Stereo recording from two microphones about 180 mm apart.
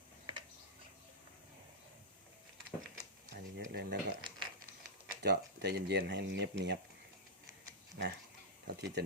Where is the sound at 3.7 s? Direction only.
55° right (ahead or behind).